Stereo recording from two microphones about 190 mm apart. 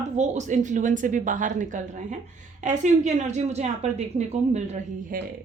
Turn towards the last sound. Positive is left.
turn(degrees=-40)  # may be behind; listen again after turning